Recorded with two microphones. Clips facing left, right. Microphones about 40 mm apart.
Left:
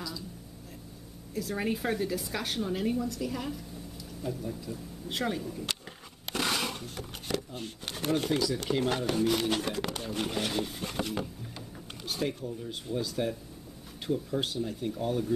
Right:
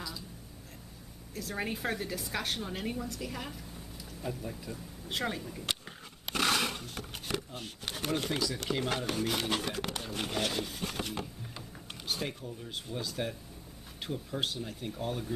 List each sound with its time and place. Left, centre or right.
1.3 s a woman's voice: centre
4.2 s speech: centre
5.0 s a woman's voice: centre
6.5 s a sound: centre
7.2 s a woman's voice: centre
11.5 s mechanisms: centre
12.6 s a woman's voice: centre